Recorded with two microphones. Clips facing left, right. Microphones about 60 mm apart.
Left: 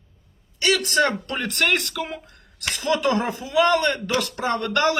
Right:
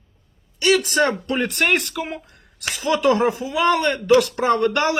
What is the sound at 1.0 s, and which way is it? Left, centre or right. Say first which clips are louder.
Speech: right 2 dB; centre.